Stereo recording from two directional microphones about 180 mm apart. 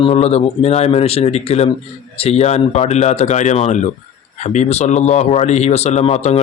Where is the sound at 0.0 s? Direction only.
35° left (ahead or behind).